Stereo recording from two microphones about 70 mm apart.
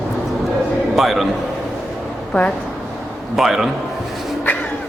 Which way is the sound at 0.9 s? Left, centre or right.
Centre.